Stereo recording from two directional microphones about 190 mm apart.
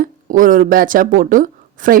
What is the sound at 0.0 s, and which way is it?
Speech, 45° right (ahead or behind).